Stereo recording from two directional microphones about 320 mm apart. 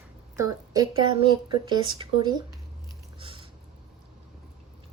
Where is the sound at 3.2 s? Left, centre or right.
Centre.